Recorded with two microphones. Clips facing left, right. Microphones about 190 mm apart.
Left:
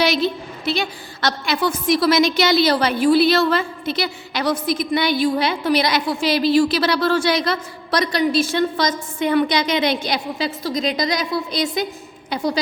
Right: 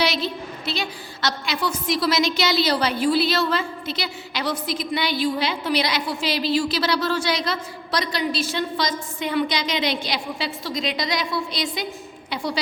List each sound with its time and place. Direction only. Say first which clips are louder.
0.0 s a woman's voice: left 5 dB; 50° left (ahead or behind)